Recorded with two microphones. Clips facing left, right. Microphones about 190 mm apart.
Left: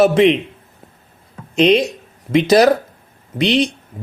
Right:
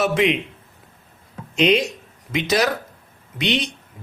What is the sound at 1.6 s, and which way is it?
Speech, 35° left (ahead or behind).